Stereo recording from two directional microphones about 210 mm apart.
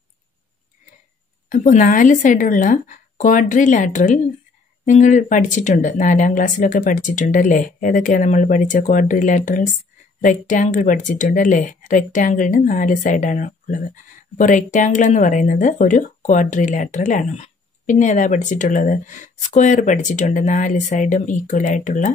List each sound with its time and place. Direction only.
1.5 s speech: 35° left (ahead or behind)